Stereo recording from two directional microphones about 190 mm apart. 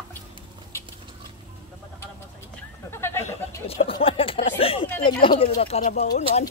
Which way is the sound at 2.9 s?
15° left (ahead or behind).